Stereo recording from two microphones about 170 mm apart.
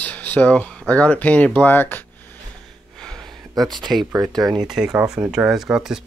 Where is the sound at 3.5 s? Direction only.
25° right (ahead or behind).